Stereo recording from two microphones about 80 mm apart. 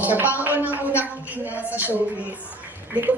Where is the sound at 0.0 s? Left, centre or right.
Right.